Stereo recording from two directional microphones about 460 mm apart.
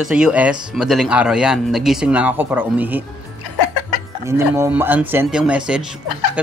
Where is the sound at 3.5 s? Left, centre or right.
Left.